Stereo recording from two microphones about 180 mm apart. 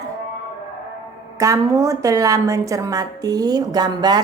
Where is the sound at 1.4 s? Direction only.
15° right (ahead or behind).